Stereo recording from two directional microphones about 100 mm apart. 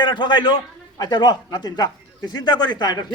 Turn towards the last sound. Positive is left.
turn(degrees=45)  # may be behind; listen again after turning